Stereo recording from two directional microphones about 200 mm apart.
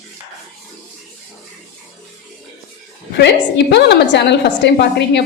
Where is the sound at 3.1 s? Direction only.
60° left (ahead or behind).